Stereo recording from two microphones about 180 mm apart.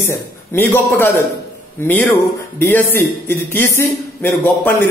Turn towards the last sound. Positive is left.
turn(degrees=10)  # may be behind; listen again after turning